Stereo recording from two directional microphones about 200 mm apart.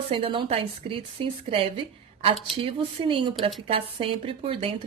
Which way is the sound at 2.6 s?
25° right (ahead or behind).